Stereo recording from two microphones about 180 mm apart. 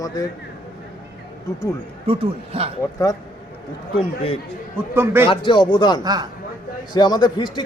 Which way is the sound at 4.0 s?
35° left (ahead or behind).